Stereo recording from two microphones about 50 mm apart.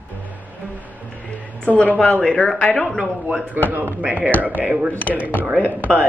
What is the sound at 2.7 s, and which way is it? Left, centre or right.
Speech, centre.